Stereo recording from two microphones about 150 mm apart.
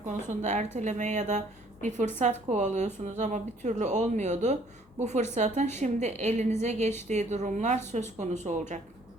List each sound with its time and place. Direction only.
0.1 s a woman's voice: 50° right (ahead or behind)